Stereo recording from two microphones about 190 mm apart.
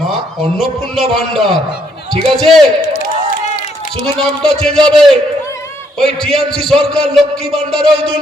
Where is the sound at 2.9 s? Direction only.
40° left (ahead or behind).